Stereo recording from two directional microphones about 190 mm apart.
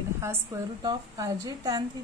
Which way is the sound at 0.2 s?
15° right (ahead or behind).